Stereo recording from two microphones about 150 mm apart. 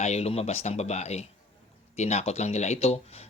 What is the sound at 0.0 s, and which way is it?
A man's voice, 45° left (ahead or behind).